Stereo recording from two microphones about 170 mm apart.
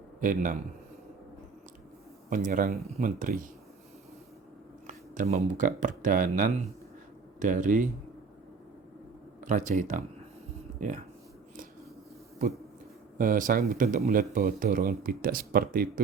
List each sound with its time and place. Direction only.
0.2 s speech: 50° right (ahead or behind)
2.3 s speech: 50° right (ahead or behind)
4.9 s speech: 45° right (ahead or behind)
9.4 s speech: 50° right (ahead or behind)
13.1 s speech: 55° right (ahead or behind)